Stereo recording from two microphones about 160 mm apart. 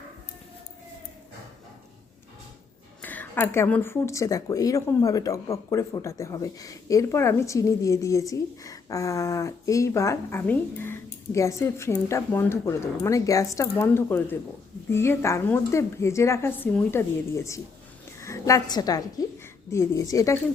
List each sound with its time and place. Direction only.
3.0 s a woman's voice: 10° left (ahead or behind)